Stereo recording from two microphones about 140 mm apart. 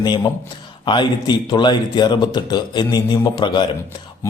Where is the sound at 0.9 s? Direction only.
35° left (ahead or behind).